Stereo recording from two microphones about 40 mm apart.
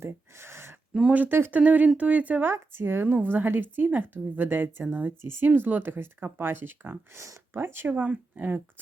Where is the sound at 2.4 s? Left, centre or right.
Right.